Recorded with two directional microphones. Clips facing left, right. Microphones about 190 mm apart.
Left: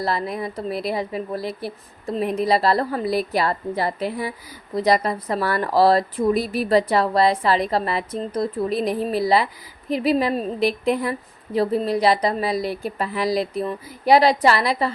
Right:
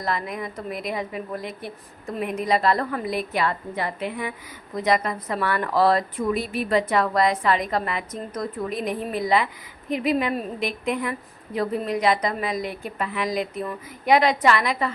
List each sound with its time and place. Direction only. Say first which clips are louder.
0.0 s a woman's voice: left 4 dB; 35° left (ahead or behind)